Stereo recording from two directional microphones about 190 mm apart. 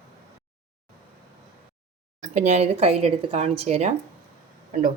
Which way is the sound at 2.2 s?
40° right (ahead or behind).